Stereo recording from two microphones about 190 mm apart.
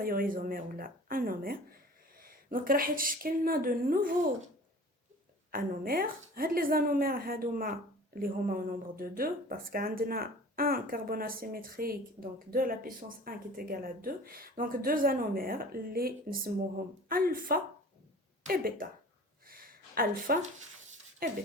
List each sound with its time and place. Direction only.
0.0 s speech: 50° right (ahead or behind)
5.5 s speech: 50° right (ahead or behind)
19.5 s a sound: 50° right (ahead or behind)
21.2 s speech: 50° right (ahead or behind)